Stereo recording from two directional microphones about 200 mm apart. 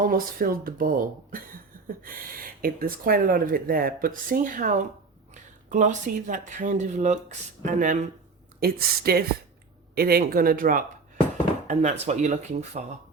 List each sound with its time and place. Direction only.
0.0 s speech: 45° right (ahead or behind)
8.6 s speech: 50° right (ahead or behind); by 12.8 s 35° right (ahead or behind)